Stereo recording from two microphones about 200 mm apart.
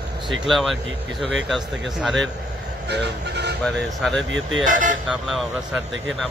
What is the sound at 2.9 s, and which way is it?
Vehicle, 60° right (ahead or behind).